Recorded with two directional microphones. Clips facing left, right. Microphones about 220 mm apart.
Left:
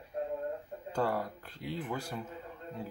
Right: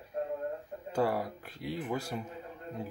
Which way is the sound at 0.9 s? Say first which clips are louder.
Right 2 dB; 10° right (ahead or behind).